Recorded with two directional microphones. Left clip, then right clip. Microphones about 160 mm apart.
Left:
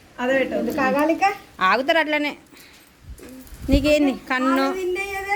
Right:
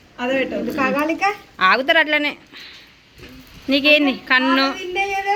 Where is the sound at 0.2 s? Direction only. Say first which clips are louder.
Even; 5° left (ahead or behind).